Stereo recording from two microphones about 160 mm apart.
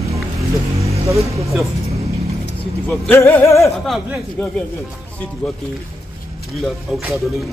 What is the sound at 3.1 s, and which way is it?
Speech, 15° left (ahead or behind).